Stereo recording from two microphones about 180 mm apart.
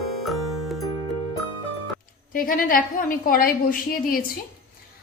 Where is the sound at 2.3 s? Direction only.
50° left (ahead or behind).